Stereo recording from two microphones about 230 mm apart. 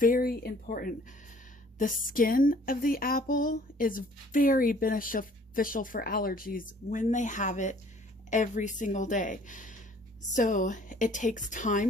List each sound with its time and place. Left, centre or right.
0.0 s speech: left